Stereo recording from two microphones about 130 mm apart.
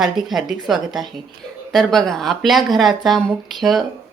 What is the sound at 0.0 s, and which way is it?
Speech, centre (ahead or behind).